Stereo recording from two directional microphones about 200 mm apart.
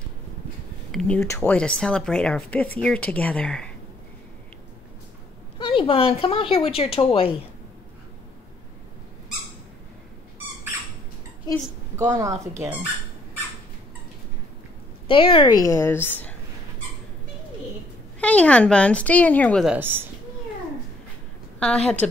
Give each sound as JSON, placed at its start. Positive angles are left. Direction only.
{"t": 0.9, "sound": "speech", "side_deg": 5}
{"t": 5.7, "sound": "speech", "side_deg": 25}
{"t": 12.0, "sound": "speech", "side_deg": -15}
{"t": 15.0, "sound": "a woman's voice", "side_deg": 25}
{"t": 18.2, "sound": "speech", "side_deg": 5}
{"t": 21.5, "sound": "a woman's voice", "side_deg": 5}